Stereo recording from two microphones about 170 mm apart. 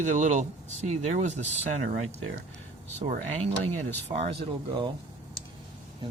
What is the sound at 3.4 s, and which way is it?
Speech, 40° right (ahead or behind).